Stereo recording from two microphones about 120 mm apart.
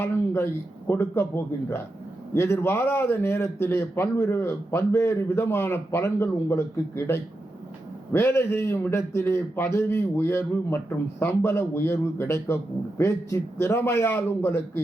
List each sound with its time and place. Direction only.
0.0 s a man's voice: 20° left (ahead or behind)